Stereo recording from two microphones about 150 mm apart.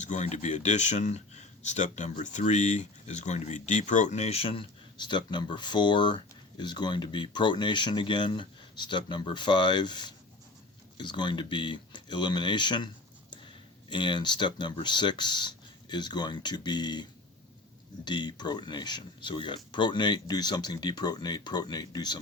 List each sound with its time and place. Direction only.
0.0 s speech: 50° left (ahead or behind); by 12.9 s 30° left (ahead or behind)
13.9 s speech: 30° left (ahead or behind)